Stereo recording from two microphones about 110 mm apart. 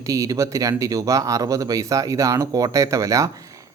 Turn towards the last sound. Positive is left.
turn(degrees=-30)  # may be behind; listen again after turning